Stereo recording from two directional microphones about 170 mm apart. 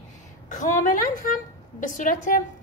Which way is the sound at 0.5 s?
50° left (ahead or behind).